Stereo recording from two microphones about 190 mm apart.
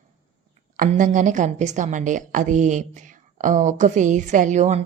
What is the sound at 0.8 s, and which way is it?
A woman's voice, 40° right (ahead or behind).